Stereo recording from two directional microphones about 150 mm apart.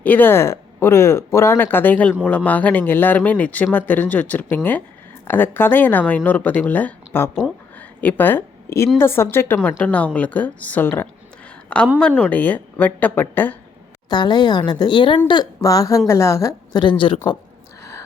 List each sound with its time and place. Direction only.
0.0 s speech: 10° left (ahead or behind)
7.8 s a sound: 10° left (ahead or behind)
9.0 s speech: 15° left (ahead or behind)
14.1 s a woman's voice: 30° left (ahead or behind)